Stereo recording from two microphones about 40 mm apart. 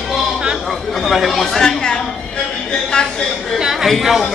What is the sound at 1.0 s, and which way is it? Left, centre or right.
Speech, centre.